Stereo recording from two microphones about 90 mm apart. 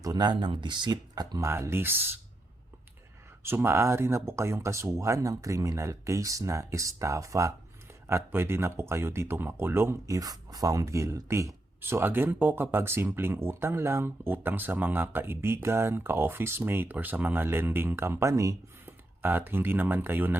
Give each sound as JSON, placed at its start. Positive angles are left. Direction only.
{"t": 0.0, "sound": "speech", "side_deg": -50}
{"t": 1.1, "sound": "speech", "side_deg": -45}
{"t": 1.5, "sound": "speech", "side_deg": -30}
{"t": 3.4, "sound": "speech", "side_deg": -25}
{"t": 10.2, "sound": "speech", "side_deg": -45}
{"t": 18.9, "sound": "speech", "side_deg": -25}